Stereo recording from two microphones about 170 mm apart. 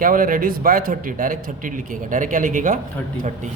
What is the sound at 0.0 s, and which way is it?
A man's voice, 55° right (ahead or behind).